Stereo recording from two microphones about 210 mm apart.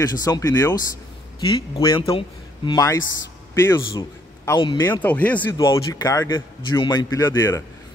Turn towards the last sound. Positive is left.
turn(degrees=10)  # may be behind; listen again after turning